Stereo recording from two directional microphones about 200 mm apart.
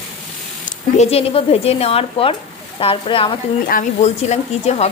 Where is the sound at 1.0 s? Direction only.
30° left (ahead or behind).